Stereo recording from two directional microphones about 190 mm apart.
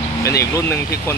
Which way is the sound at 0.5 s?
15° left (ahead or behind).